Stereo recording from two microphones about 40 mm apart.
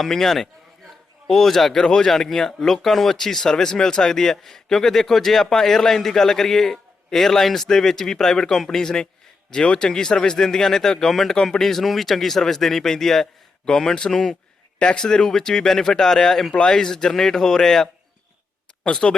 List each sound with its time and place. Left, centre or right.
0.0 s a man's voice: centre
18.9 s speech: centre